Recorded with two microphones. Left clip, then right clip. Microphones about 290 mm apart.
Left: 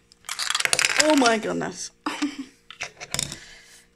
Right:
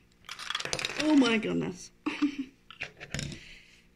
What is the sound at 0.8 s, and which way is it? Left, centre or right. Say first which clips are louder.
Mechanisms: left 6 dB; left.